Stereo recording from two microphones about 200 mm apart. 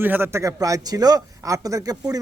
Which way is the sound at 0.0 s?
10° right (ahead or behind).